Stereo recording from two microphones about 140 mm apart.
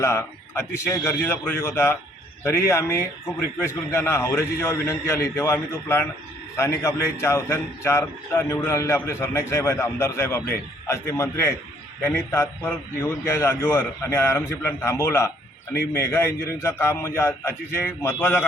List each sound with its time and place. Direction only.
0.0 s a man's voice: 20° left (ahead or behind)